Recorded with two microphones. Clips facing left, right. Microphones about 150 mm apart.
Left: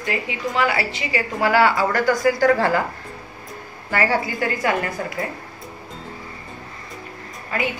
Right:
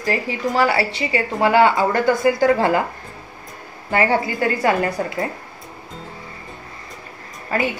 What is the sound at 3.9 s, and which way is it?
A woman's voice, 25° right (ahead or behind).